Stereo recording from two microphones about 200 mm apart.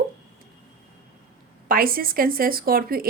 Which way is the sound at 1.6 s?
45° right (ahead or behind).